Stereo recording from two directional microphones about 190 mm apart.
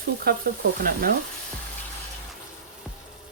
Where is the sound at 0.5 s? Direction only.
50° right (ahead or behind).